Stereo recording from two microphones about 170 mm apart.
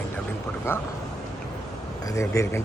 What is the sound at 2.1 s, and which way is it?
Speech, 20° left (ahead or behind).